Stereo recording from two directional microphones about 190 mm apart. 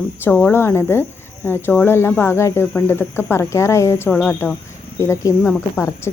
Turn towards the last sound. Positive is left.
turn(degrees=15)  # may be behind; listen again after turning